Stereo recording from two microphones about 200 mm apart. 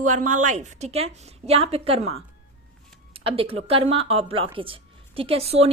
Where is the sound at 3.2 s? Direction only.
30° right (ahead or behind).